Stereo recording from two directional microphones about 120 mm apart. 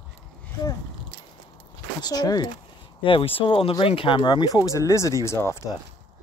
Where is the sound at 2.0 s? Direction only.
35° left (ahead or behind).